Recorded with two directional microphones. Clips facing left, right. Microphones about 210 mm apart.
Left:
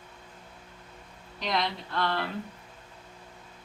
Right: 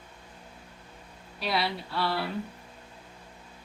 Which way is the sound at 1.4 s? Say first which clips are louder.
Even; 10° right (ahead or behind).